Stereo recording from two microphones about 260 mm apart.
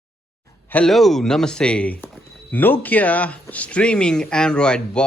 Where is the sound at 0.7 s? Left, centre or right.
Centre.